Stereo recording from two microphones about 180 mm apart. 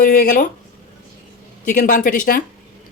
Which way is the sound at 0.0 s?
45° left (ahead or behind).